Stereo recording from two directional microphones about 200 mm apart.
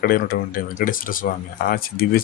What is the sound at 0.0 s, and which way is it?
Speech, 45° left (ahead or behind).